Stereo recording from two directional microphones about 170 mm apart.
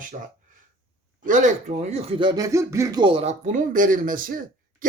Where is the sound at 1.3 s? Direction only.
45° right (ahead or behind).